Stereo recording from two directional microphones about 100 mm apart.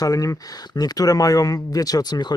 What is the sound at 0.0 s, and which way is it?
Speech, 35° left (ahead or behind).